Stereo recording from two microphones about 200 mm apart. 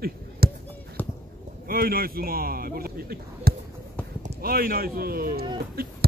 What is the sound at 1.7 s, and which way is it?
Speech, 50° right (ahead or behind).